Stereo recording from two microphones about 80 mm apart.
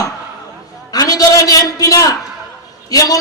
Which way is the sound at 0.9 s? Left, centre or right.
Left.